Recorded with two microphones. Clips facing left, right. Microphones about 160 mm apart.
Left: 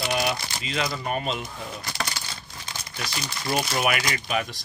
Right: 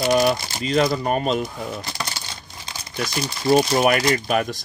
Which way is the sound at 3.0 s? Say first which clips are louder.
Right 10 dB; 35° right (ahead or behind).